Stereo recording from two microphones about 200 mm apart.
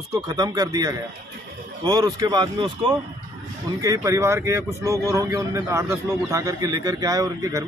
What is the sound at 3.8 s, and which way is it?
A man's voice, 15° right (ahead or behind).